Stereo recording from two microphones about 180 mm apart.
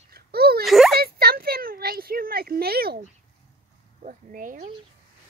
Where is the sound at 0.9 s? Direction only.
60° right (ahead or behind).